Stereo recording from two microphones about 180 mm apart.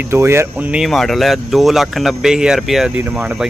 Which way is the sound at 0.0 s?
15° right (ahead or behind).